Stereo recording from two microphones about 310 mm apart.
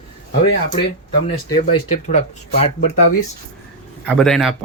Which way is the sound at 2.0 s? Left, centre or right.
Left.